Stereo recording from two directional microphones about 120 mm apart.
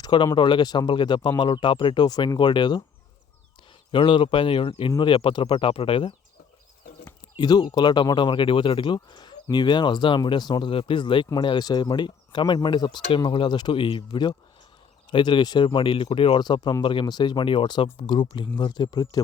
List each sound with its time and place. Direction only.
0.0 s speech: 40° left (ahead or behind)
3.9 s speech: 45° left (ahead or behind)
7.3 s speech: 35° left (ahead or behind)